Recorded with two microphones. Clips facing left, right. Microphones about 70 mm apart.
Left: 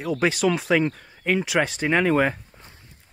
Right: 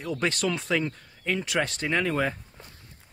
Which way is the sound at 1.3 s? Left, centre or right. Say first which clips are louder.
Left 5 dB; centre.